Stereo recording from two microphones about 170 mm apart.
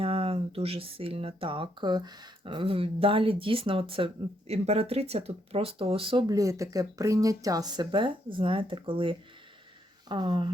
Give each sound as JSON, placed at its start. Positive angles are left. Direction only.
{"t": 0.0, "sound": "speech", "side_deg": -35}